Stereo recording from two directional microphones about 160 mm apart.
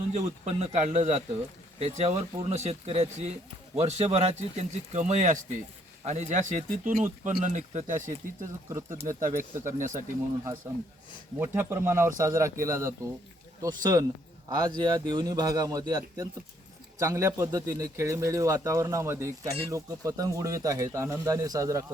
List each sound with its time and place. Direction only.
0.1 s speech: 45° right (ahead or behind)
8.7 s speech: 20° right (ahead or behind)
9.0 s speech: 55° right (ahead or behind)
11.3 s speech: 15° right (ahead or behind)